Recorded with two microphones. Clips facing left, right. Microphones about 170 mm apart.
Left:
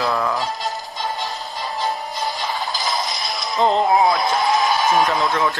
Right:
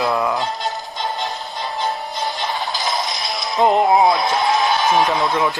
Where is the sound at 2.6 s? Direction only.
Centre (ahead or behind).